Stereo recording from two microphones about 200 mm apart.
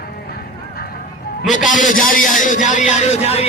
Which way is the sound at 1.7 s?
40° left (ahead or behind).